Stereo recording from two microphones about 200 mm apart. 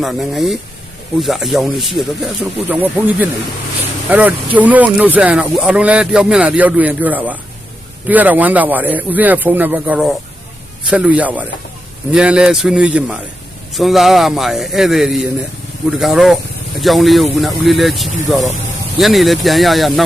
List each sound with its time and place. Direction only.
0.0 s speech: centre (ahead or behind)